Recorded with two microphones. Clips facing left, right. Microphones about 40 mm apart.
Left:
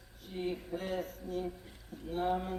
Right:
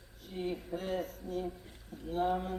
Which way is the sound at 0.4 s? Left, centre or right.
Centre.